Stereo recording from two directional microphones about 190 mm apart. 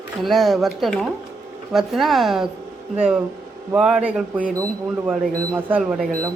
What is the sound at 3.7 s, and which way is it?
Speech, 5° right (ahead or behind).